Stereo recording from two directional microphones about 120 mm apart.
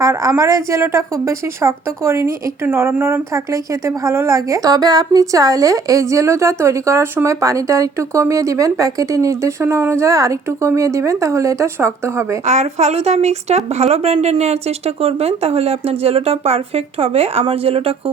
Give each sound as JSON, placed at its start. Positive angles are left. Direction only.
{"t": 0.0, "sound": "a woman's voice", "side_deg": -25}
{"t": 12.5, "sound": "speech", "side_deg": -70}